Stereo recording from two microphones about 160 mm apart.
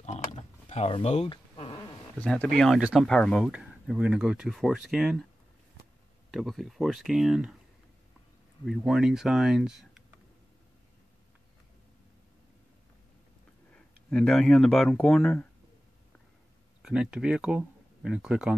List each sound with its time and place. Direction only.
0.0 s a sound: 45° left (ahead or behind)
2.1 s speech: 5° left (ahead or behind)
6.3 s speech: centre (ahead or behind)
8.6 s speech: centre (ahead or behind)
13.7 s speech: 5° left (ahead or behind)
16.8 s speech: 5° right (ahead or behind)